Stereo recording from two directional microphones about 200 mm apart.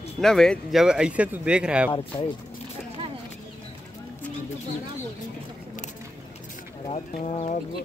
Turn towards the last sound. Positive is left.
turn(degrees=30)  # may be behind; listen again after turning